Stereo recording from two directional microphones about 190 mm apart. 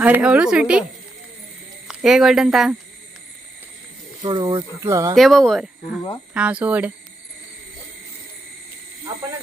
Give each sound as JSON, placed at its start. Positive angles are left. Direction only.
{"t": 0.0, "sound": "speech", "side_deg": -5}
{"t": 1.9, "sound": "speech", "side_deg": -5}
{"t": 4.2, "sound": "speech", "side_deg": -25}
{"t": 5.1, "sound": "speech", "side_deg": 0}
{"t": 6.3, "sound": "cricket", "side_deg": -5}